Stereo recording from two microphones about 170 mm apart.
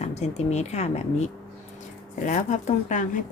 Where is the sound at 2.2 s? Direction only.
45° left (ahead or behind).